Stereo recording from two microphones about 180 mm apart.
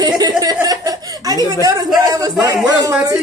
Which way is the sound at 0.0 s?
20° right (ahead or behind).